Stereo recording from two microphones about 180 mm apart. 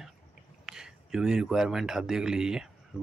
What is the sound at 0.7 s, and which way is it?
A man's voice, 5° right (ahead or behind).